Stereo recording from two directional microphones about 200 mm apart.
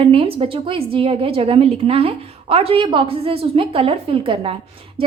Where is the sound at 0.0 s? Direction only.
25° right (ahead or behind).